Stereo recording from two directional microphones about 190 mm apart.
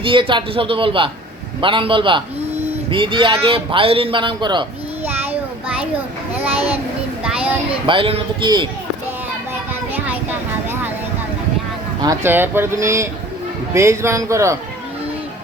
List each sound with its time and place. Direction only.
0.0 s a man's voice: 25° right (ahead or behind)
5.0 s child singing: 10° right (ahead or behind)
7.7 s a man's voice: 25° right (ahead or behind)
12.0 s speech: 10° right (ahead or behind)